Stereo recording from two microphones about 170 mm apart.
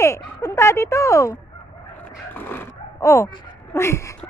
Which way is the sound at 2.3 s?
10° left (ahead or behind).